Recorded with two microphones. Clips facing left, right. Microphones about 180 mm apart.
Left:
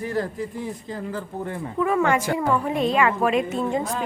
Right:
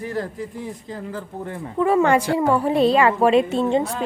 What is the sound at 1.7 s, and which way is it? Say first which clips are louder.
A woman's voice: right 4 dB; 30° right (ahead or behind).